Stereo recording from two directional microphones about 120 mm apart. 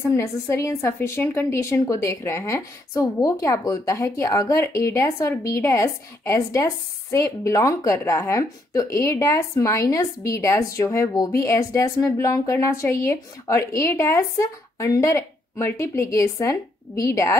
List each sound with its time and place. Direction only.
0.0 s a woman's voice: 20° left (ahead or behind)